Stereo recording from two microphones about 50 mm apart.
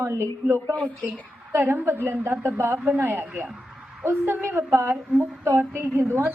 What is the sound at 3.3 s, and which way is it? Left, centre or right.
Speech, right.